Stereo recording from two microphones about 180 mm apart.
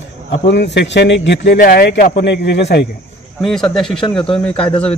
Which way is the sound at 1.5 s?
55° left (ahead or behind).